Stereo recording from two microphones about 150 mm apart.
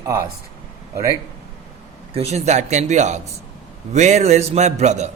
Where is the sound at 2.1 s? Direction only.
45° right (ahead or behind).